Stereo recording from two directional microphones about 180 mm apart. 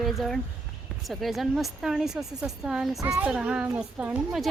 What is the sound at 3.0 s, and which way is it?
Speech, 20° right (ahead or behind).